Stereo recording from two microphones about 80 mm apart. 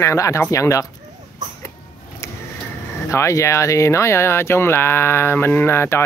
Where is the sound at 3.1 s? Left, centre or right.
Left.